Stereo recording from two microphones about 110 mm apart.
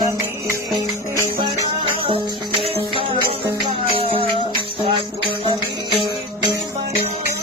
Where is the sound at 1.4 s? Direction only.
55° right (ahead or behind).